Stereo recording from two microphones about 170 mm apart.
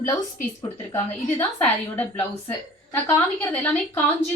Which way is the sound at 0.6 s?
15° left (ahead or behind).